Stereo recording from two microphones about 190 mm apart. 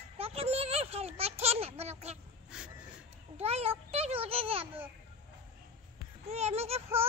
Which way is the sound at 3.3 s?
30° right (ahead or behind).